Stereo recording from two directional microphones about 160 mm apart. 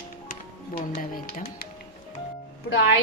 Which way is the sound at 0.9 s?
60° left (ahead or behind).